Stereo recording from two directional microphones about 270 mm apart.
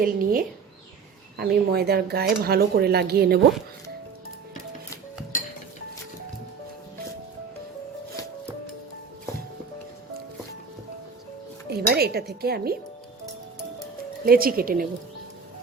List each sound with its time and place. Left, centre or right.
0.0 s speech: right
11.7 s speech: right
14.3 s speech: right